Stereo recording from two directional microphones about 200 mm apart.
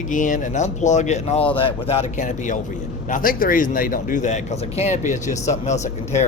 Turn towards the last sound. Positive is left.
turn(degrees=35)  # may be behind; listen again after turning